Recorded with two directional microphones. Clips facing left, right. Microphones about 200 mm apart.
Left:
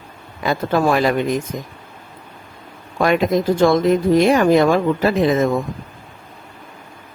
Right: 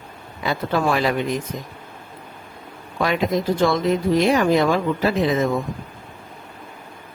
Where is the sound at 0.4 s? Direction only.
45° left (ahead or behind).